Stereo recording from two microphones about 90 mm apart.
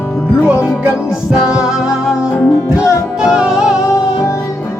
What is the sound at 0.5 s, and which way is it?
Music, 30° left (ahead or behind).